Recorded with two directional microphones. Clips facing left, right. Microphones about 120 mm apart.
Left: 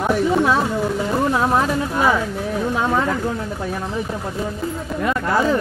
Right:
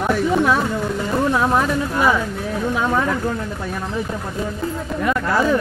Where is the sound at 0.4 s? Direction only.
25° left (ahead or behind).